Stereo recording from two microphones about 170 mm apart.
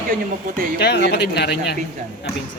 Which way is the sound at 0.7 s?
75° left (ahead or behind).